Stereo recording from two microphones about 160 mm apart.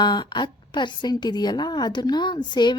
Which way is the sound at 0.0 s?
25° left (ahead or behind).